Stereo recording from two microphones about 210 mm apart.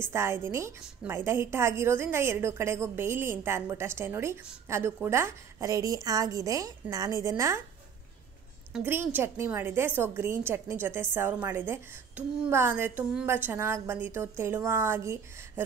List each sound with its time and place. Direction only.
0.1 s a woman's voice: 15° right (ahead or behind)
8.7 s a woman's voice: 10° right (ahead or behind)